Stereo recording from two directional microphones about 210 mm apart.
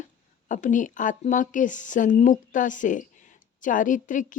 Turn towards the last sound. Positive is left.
turn(degrees=40)  # may be behind; listen again after turning